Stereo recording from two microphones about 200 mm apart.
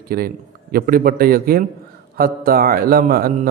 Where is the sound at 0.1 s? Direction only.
50° right (ahead or behind).